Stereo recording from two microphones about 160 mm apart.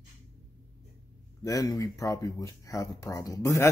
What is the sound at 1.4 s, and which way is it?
Speech, 20° left (ahead or behind).